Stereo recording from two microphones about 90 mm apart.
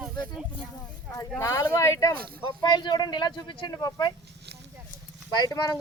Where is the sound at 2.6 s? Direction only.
55° left (ahead or behind).